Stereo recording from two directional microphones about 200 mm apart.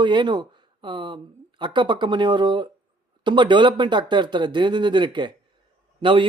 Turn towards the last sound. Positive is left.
turn(degrees=-25)  # may be behind; listen again after turning